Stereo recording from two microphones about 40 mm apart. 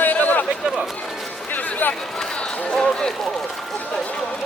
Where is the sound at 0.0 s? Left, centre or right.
Left.